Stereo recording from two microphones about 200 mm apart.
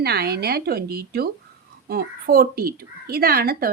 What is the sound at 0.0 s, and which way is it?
Speech, 55° right (ahead or behind).